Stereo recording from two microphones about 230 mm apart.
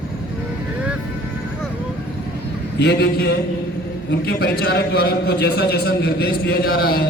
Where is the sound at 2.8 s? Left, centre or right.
Left.